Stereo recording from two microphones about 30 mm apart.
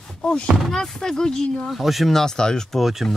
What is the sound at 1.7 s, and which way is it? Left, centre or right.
Speech, centre.